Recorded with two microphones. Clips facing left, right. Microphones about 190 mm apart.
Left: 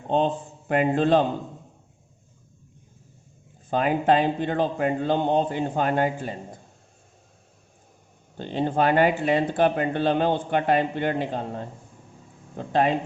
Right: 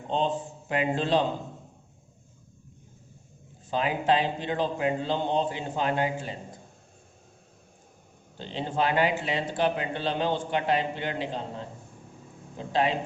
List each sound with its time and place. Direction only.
0.1 s a man's voice: 55° left (ahead or behind)
3.7 s speech: 50° left (ahead or behind)
8.4 s speech: 50° left (ahead or behind)